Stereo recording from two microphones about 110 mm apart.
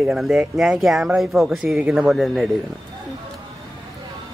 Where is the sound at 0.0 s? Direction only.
5° right (ahead or behind).